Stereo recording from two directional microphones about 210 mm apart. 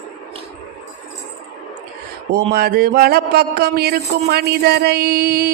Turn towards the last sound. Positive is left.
turn(degrees=-50)  # may be behind; listen again after turning